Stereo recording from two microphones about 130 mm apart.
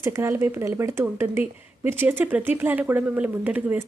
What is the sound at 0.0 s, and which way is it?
A woman's voice, 20° right (ahead or behind).